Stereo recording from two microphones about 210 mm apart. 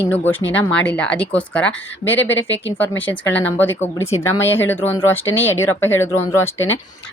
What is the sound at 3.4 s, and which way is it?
A woman's voice, 10° left (ahead or behind).